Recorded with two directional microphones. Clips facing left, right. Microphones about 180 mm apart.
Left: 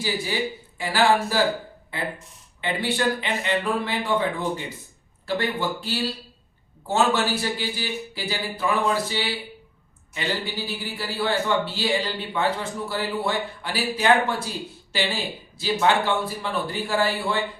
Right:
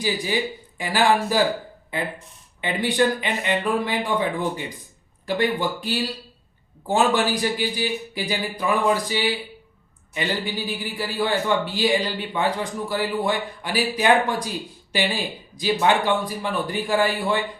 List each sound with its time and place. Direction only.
0.8 s a man's voice: 15° right (ahead or behind)